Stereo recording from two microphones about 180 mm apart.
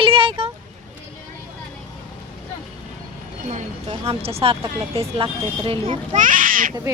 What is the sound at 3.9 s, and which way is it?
Speech, 35° right (ahead or behind).